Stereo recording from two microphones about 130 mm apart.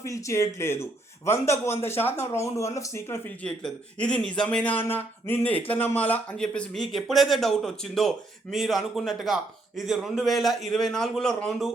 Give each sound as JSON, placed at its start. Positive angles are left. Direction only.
{"t": 0.0, "sound": "a man's voice", "side_deg": 25}
{"t": 3.4, "sound": "a man's voice", "side_deg": 10}